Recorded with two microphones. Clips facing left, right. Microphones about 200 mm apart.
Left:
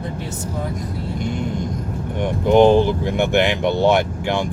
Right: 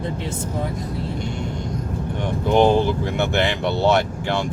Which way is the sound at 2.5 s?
15° left (ahead or behind).